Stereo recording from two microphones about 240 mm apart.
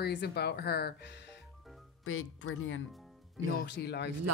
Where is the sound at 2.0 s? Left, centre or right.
Left.